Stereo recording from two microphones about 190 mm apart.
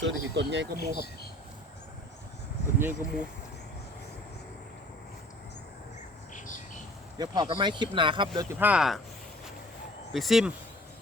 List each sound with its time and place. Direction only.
0.0 s speech: 65° right (ahead or behind)
2.7 s speech: 10° right (ahead or behind)
6.3 s bird: 45° left (ahead or behind)
7.2 s speech: 25° right (ahead or behind)
8.5 s speech: 5° right (ahead or behind)
10.1 s speech: centre (ahead or behind)